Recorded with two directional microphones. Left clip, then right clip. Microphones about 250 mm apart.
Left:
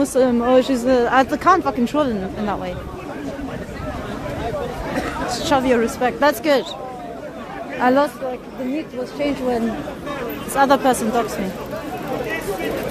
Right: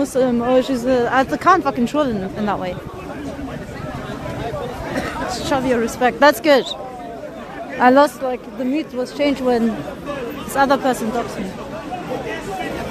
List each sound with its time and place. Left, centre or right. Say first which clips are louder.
0.0 s speech: left 1 dB; centre
5.3 s speech: left 2 dB; centre
5.9 s speech: right 4 dB; centre
7.8 s speech: right 4 dB; centre
8.3 s speech: right 3 dB; right
10.5 s speech: left 1 dB; centre